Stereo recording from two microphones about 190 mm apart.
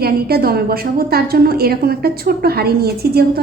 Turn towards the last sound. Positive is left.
turn(degrees=-55)  # may be behind; listen again after turning